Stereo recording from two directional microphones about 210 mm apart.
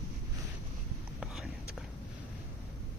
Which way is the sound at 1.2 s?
Centre (ahead or behind).